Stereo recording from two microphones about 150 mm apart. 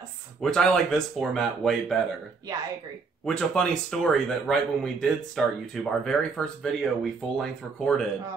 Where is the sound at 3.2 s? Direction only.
5° left (ahead or behind).